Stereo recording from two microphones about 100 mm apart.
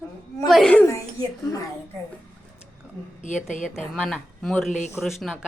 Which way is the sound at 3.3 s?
5° right (ahead or behind).